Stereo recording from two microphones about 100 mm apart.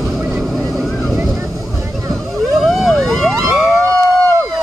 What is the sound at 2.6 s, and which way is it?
Vehicle, centre (ahead or behind).